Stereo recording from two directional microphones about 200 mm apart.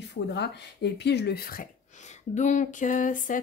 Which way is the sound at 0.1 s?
60° left (ahead or behind).